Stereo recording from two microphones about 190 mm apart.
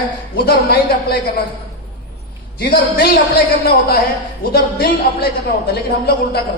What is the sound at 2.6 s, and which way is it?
Speech, 55° left (ahead or behind).